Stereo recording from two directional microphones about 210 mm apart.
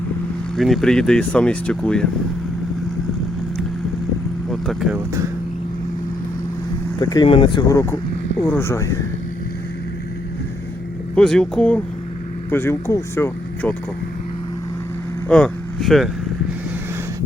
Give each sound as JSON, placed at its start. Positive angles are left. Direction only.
{"t": 0.5, "sound": "speech", "side_deg": 0}
{"t": 4.4, "sound": "vehicle", "side_deg": 0}
{"t": 7.0, "sound": "speech", "side_deg": 20}
{"t": 11.1, "sound": "speech", "side_deg": 5}
{"t": 15.3, "sound": "speech", "side_deg": 5}